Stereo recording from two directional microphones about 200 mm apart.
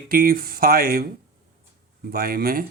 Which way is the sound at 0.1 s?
45° right (ahead or behind).